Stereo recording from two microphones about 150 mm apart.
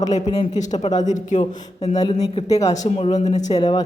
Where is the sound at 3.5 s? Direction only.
30° left (ahead or behind).